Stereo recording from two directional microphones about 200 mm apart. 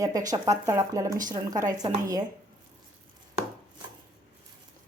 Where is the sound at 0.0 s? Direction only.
15° right (ahead or behind).